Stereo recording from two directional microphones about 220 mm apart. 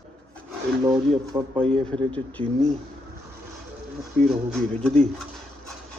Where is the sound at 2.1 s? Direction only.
5° left (ahead or behind).